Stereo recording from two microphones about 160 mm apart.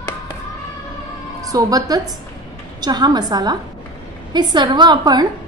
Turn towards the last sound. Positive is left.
turn(degrees=-25)  # may be behind; listen again after turning